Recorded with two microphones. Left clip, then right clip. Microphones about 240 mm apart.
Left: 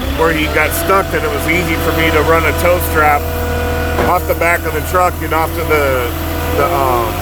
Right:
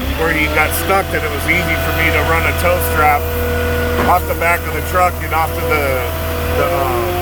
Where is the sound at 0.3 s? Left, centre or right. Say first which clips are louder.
Right 1 dB; centre.